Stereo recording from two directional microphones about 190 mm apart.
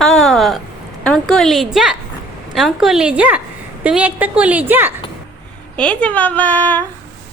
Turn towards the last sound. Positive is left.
turn(degrees=10)  # may be behind; listen again after turning